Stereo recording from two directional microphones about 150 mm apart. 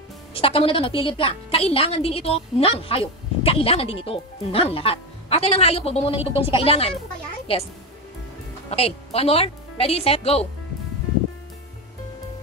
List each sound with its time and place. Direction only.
0.3 s a woman's voice: 40° left (ahead or behind)
8.6 s speech: 40° left (ahead or behind)